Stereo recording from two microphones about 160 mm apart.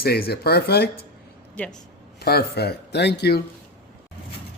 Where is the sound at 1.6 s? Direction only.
10° left (ahead or behind).